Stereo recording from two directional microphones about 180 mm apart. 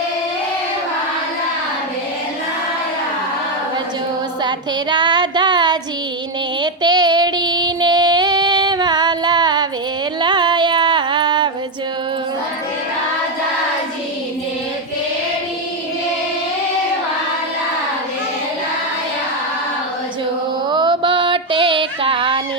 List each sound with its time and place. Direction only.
4.4 s child singing: 25° right (ahead or behind)
10.2 s music: 25° right (ahead or behind)
20.7 s a sound: 25° right (ahead or behind)